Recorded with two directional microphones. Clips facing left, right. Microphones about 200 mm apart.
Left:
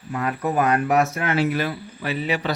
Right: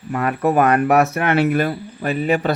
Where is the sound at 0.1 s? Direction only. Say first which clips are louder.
Right 6 dB; 60° right (ahead or behind).